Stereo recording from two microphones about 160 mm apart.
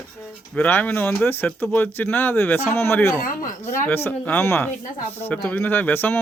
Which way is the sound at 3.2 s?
60° left (ahead or behind).